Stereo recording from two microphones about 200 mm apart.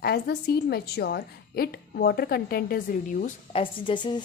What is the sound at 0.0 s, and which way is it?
Speech, 55° left (ahead or behind).